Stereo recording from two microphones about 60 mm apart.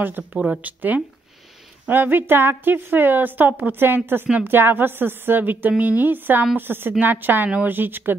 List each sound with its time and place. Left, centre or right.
0.0 s a woman's voice: right